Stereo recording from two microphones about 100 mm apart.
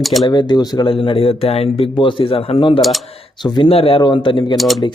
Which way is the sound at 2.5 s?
50° left (ahead or behind).